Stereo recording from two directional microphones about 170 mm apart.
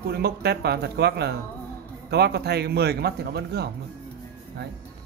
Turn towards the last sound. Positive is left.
turn(degrees=-70)  # may be behind; listen again after turning